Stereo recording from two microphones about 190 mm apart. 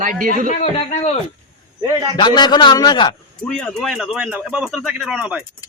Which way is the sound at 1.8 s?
20° right (ahead or behind).